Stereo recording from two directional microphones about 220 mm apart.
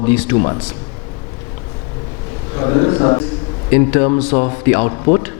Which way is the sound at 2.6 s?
25° left (ahead or behind).